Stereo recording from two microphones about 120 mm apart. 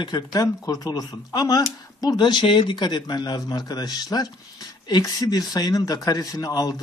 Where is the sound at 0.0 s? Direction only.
40° left (ahead or behind).